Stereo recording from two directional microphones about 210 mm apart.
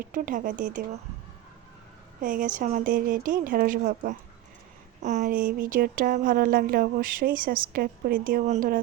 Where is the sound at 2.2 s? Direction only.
40° right (ahead or behind).